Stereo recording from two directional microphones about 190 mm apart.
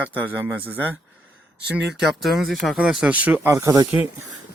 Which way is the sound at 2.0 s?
Centre (ahead or behind).